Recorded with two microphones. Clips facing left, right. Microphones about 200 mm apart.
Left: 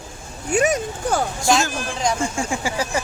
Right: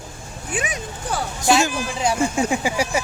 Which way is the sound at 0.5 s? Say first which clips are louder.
Left 9 dB; 45° left (ahead or behind).